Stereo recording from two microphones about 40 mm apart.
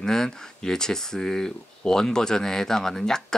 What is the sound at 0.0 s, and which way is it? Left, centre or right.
Speech, centre.